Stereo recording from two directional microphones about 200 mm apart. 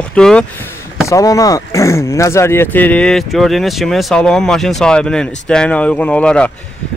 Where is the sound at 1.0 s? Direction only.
15° left (ahead or behind).